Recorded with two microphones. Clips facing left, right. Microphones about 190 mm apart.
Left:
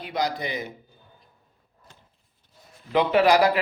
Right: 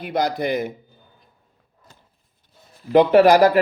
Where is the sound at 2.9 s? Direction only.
45° right (ahead or behind).